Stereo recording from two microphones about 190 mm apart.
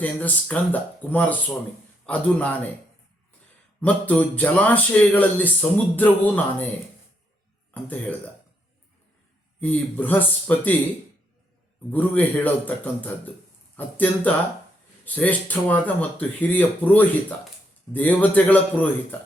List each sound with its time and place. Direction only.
0.0 s speech: 10° left (ahead or behind)
3.8 s speech: 5° left (ahead or behind)
7.7 s speech: 10° left (ahead or behind)
9.6 s speech: 10° left (ahead or behind)
11.9 s speech: 10° left (ahead or behind)